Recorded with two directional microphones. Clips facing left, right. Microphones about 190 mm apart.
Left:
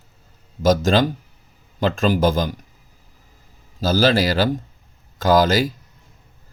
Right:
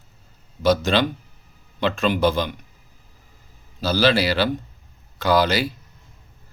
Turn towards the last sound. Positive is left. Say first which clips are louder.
# left 3 dB
turn(degrees=45)  # may be behind; listen again after turning